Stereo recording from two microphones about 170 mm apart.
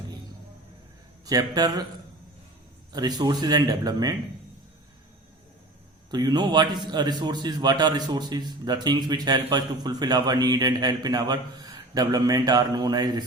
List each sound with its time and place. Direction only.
1.2 s a man's voice: 20° right (ahead or behind)
2.9 s a man's voice: 25° right (ahead or behind)
6.1 s a man's voice: 25° right (ahead or behind)